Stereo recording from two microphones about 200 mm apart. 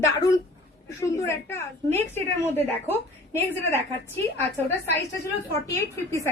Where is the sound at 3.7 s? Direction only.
15° left (ahead or behind).